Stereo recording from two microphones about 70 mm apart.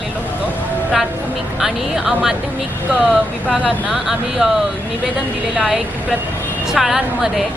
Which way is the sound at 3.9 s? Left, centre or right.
Centre.